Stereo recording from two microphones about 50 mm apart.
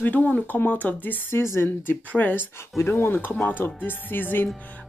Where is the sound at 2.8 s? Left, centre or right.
Left.